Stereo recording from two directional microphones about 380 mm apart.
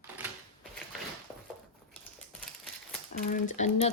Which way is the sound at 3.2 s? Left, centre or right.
Centre.